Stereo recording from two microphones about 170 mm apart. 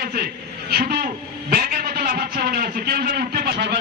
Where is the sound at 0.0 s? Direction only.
65° right (ahead or behind).